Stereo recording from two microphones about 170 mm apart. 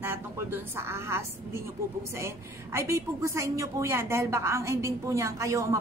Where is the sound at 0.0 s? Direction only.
15° right (ahead or behind).